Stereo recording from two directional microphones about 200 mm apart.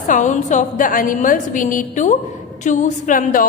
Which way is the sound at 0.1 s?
40° left (ahead or behind).